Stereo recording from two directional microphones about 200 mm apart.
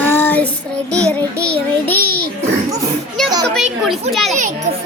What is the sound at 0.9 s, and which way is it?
Child singing, 5° left (ahead or behind).